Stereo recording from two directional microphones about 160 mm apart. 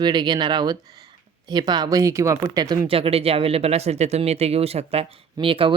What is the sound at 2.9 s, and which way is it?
Speech, 35° right (ahead or behind).